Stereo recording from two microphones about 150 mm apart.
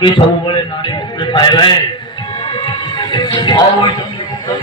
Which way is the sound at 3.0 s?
30° left (ahead or behind).